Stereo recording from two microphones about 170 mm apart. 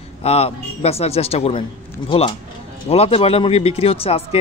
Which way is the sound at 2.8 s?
35° left (ahead or behind).